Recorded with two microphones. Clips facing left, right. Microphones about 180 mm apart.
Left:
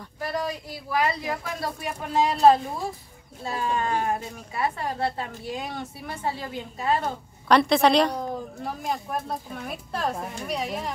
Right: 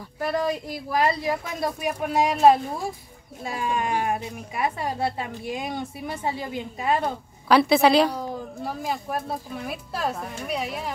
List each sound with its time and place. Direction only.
0.2 s speech: 55° right (ahead or behind)
1.0 s speech: 25° right (ahead or behind)
1.6 s a woman's voice: 15° right (ahead or behind)